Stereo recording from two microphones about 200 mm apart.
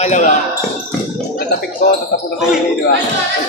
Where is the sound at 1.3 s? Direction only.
45° left (ahead or behind).